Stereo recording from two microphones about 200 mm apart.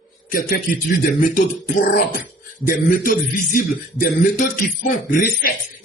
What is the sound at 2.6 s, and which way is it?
A man's voice, 45° left (ahead or behind).